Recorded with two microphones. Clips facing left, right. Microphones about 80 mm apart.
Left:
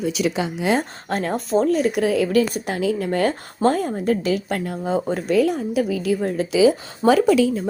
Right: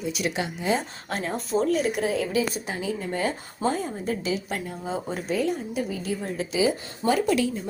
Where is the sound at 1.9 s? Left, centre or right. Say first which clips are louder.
Left 7 dB; left.